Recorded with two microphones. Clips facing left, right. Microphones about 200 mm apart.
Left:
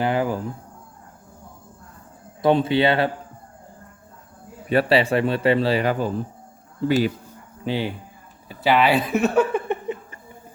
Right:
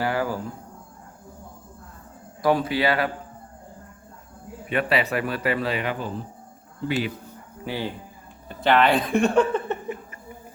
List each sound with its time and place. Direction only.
0.0 s speech: 20° left (ahead or behind)
2.4 s a man's voice: 25° left (ahead or behind)
4.7 s a man's voice: 30° left (ahead or behind)
7.6 s a man's voice: 20° left (ahead or behind)
8.4 s speech: 5° left (ahead or behind)